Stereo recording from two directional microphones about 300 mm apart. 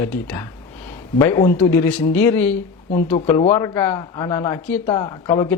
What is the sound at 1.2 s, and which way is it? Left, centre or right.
Speech, centre.